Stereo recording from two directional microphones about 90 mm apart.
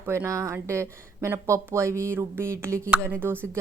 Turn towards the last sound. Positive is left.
turn(degrees=-25)  # may be behind; listen again after turning